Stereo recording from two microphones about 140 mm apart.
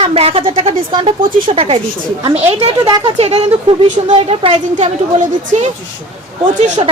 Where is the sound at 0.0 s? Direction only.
45° right (ahead or behind).